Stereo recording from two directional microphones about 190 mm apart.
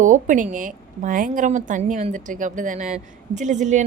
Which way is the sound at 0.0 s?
40° right (ahead or behind).